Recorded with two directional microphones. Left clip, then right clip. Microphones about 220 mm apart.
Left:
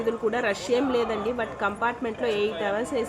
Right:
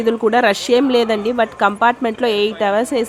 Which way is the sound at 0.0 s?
50° right (ahead or behind).